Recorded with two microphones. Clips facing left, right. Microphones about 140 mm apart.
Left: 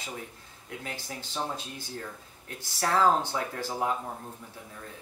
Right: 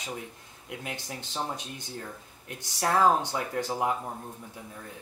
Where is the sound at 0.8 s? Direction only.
20° right (ahead or behind).